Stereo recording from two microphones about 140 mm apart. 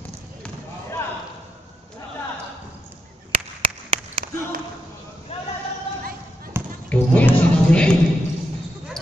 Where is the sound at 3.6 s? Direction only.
40° right (ahead or behind).